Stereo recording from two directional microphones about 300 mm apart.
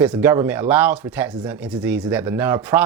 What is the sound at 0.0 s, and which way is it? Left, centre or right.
Speech, centre.